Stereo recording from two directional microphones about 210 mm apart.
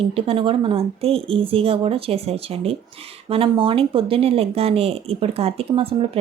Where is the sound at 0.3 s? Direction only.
25° right (ahead or behind).